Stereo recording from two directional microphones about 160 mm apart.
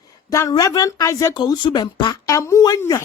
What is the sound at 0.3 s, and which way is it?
Speech, 20° left (ahead or behind).